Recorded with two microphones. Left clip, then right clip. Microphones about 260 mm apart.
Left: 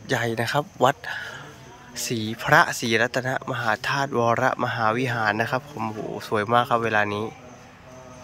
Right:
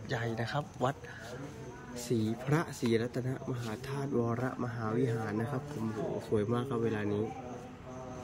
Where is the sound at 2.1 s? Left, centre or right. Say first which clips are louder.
Left 16 dB; left.